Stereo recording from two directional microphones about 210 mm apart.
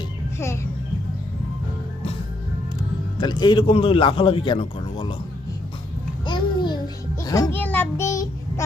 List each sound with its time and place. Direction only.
0.3 s a child's voice: 15° left (ahead or behind)
3.2 s a man's voice: 20° left (ahead or behind)
6.2 s babbling: 20° left (ahead or behind)
7.2 s child singing: 15° left (ahead or behind)